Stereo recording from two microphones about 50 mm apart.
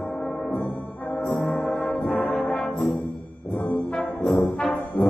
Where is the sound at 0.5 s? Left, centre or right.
Left.